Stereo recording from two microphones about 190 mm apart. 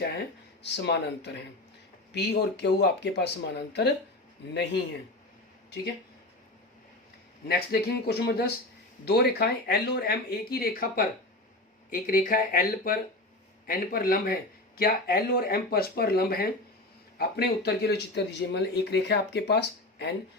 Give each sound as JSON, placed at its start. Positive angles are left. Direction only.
{"t": 0.6, "sound": "speech", "side_deg": 65}
{"t": 7.4, "sound": "speech", "side_deg": 55}